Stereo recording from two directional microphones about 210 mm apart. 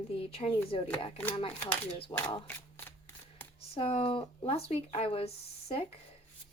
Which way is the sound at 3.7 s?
30° left (ahead or behind).